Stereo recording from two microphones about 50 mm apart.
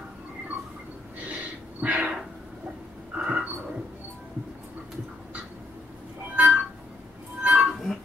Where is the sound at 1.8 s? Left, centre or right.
Right.